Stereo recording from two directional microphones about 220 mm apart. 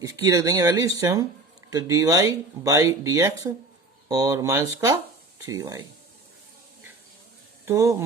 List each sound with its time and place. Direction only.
0.0 s speech: 15° right (ahead or behind)
7.6 s speech: 10° right (ahead or behind)